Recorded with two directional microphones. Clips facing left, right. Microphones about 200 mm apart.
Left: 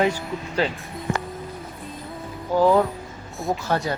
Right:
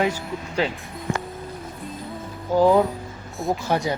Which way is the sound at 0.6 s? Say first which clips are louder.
Even; 15° right (ahead or behind).